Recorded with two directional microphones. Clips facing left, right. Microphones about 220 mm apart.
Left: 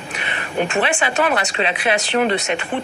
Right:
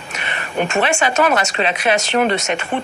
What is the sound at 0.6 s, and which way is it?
Speech, 40° right (ahead or behind).